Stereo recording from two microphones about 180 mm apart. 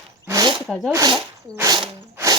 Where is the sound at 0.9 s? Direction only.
15° right (ahead or behind).